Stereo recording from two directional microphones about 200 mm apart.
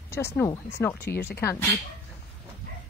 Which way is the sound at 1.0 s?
55° left (ahead or behind).